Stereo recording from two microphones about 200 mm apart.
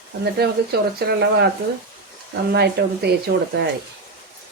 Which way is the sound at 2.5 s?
55° right (ahead or behind).